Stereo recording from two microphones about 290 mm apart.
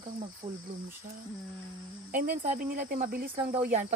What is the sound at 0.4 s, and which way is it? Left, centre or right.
Speech, centre.